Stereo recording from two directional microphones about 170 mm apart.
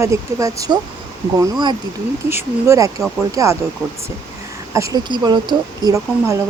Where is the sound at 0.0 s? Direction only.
20° right (ahead or behind).